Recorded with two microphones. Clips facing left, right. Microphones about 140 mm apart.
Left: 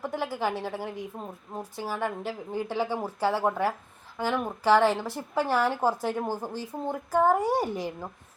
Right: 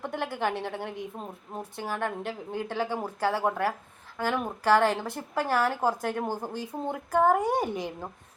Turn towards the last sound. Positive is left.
turn(degrees=5)  # may be behind; listen again after turning